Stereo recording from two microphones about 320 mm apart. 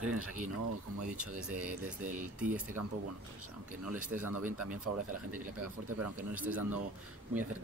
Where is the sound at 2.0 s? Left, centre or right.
Right.